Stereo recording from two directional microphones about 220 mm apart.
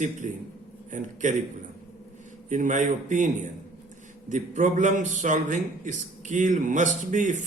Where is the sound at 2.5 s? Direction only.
35° right (ahead or behind).